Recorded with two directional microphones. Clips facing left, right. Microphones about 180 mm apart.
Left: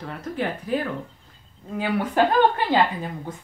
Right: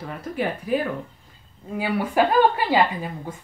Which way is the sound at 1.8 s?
10° right (ahead or behind).